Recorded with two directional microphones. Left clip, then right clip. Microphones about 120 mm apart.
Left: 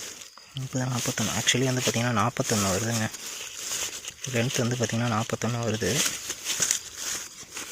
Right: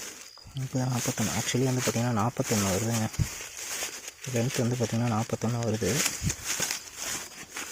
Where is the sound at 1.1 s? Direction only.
Centre (ahead or behind).